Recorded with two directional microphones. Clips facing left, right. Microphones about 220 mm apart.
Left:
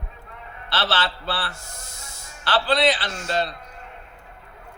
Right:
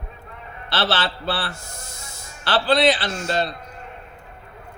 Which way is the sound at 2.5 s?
40° right (ahead or behind).